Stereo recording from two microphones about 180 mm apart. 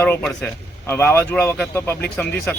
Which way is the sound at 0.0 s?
10° left (ahead or behind).